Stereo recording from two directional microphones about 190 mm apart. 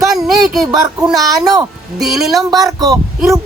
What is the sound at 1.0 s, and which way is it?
Speech, centre (ahead or behind).